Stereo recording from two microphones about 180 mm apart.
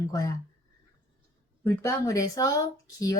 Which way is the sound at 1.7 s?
20° left (ahead or behind).